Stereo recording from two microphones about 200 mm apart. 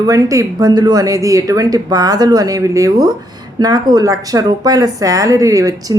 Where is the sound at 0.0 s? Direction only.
15° right (ahead or behind).